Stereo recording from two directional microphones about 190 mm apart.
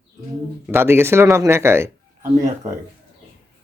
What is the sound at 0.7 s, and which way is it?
Speech, 10° right (ahead or behind).